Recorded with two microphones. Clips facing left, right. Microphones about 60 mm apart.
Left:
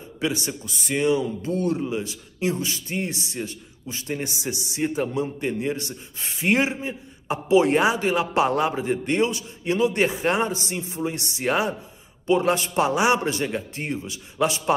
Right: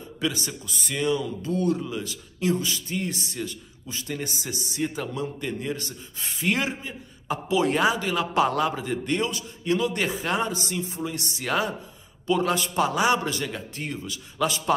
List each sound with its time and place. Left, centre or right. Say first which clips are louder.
0.5 s a man's voice: left 5 dB; left